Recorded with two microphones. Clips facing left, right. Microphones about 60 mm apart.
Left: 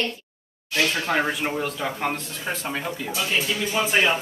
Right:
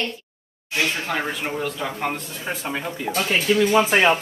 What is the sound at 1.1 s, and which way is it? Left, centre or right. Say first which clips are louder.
Speech: left 2 dB; centre.